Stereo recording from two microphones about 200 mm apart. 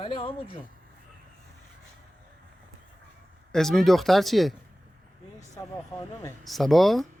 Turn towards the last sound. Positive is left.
turn(degrees=0)  # may be behind; listen again after turning